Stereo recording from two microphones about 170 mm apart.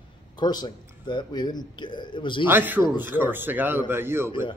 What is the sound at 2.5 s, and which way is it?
Speech, 10° right (ahead or behind).